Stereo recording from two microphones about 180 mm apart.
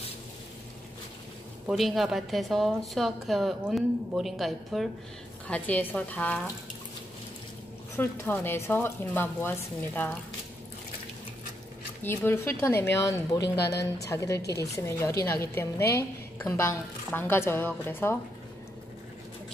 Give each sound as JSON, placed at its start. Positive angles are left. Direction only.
{"t": 1.7, "sound": "a woman's voice", "side_deg": 0}
{"t": 7.9, "sound": "speech", "side_deg": 10}
{"t": 12.0, "sound": "speech", "side_deg": 10}